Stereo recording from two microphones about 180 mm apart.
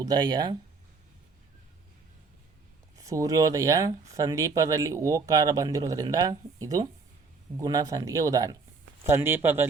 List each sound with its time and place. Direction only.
0.0 s speech: 20° right (ahead or behind)
3.0 s speech: 20° right (ahead or behind)